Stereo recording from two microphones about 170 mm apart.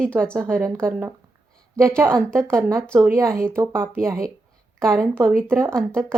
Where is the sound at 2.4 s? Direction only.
15° right (ahead or behind).